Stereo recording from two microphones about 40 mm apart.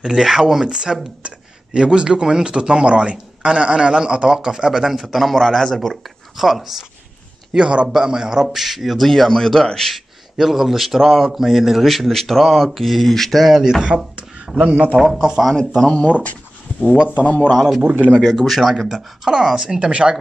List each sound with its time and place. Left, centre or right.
0.2 s speech: centre
5.0 s a man's voice: centre
6.3 s speech: centre
7.5 s speech: right
8.5 s speech: centre
8.9 s speech: centre
9.9 s speech: centre
11.3 s a man's voice: centre
13.4 s speech: centre
14.6 s a man's voice: right
15.0 s speech: centre
15.4 s a man's voice: centre
17.2 s speech: left
17.6 s a man's voice: centre; by 20.2 s right